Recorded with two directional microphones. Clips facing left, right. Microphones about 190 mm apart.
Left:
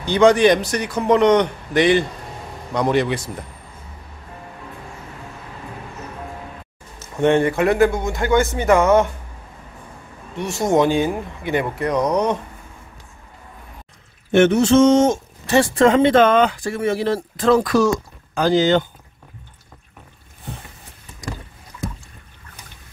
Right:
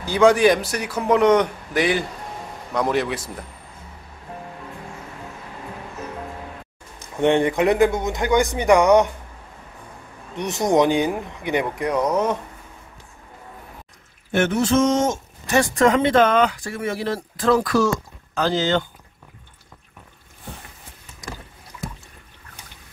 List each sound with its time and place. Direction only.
0.0 s a man's voice: 5° right (ahead or behind)
7.0 s a man's voice: 15° right (ahead or behind)
10.3 s a man's voice: 20° right (ahead or behind)
12.1 s a man's voice: 5° right (ahead or behind)
14.3 s speech: 25° left (ahead or behind)